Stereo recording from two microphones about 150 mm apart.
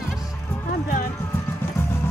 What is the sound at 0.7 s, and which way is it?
Music, 70° left (ahead or behind).